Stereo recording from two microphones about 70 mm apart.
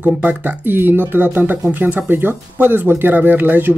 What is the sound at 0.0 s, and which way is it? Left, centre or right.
Speech, right.